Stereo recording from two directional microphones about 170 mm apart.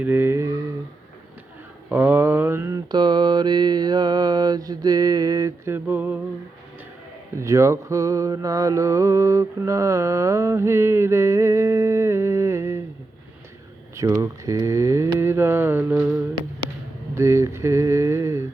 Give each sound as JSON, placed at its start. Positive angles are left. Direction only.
{"t": 0.0, "sound": "mantra", "side_deg": -15}
{"t": 1.9, "sound": "mantra", "side_deg": -10}
{"t": 7.3, "sound": "mantra", "side_deg": -15}
{"t": 13.9, "sound": "mantra", "side_deg": -15}